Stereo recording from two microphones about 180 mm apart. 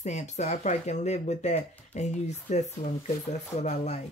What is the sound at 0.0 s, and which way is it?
Speech, 40° left (ahead or behind).